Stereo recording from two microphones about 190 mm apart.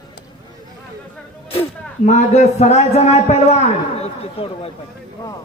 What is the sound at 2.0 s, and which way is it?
A man's voice, 35° left (ahead or behind).